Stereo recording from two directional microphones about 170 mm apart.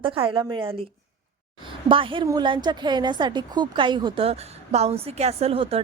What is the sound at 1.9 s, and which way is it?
A woman's voice, 30° right (ahead or behind).